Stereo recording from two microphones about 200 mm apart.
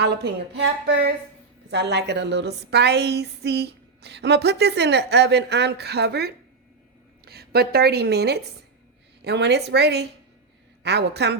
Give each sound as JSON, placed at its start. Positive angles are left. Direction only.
{"t": 0.0, "sound": "a woman's voice", "side_deg": -55}